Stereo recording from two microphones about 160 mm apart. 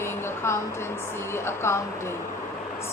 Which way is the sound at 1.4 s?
15° left (ahead or behind).